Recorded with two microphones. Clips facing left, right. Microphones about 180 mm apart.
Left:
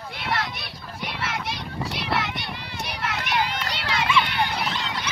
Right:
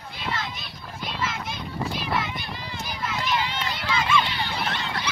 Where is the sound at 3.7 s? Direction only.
70° left (ahead or behind).